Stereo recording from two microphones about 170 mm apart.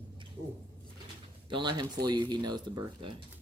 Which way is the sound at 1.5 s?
25° right (ahead or behind).